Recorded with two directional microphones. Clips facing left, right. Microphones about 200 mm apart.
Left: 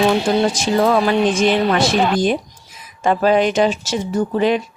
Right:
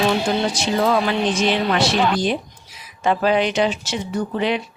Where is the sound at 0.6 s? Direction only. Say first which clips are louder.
Left 3 dB; 50° left (ahead or behind).